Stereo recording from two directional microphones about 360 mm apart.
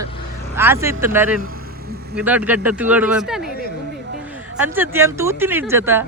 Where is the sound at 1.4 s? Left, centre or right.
Right.